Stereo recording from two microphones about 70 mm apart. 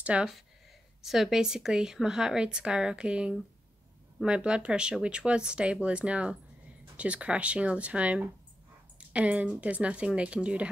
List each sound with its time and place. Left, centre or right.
0.0 s speech: centre
1.0 s speech: centre